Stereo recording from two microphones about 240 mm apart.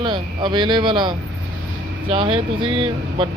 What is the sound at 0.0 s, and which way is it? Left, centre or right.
Speech, centre.